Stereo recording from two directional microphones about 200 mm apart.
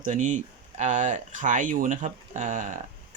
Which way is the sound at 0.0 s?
40° right (ahead or behind).